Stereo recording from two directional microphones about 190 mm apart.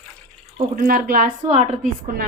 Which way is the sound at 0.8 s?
50° right (ahead or behind).